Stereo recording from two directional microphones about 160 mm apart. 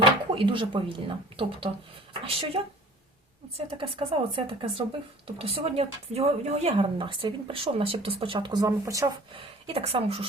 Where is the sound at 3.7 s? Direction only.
35° right (ahead or behind).